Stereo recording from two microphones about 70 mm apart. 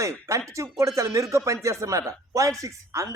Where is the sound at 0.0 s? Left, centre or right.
Right.